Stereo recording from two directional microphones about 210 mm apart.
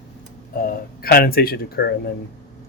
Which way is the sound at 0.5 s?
45° left (ahead or behind).